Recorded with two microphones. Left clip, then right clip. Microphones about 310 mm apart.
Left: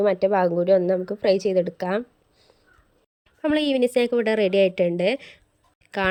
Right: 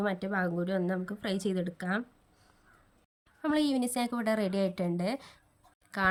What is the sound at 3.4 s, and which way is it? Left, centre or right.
A woman's voice, centre.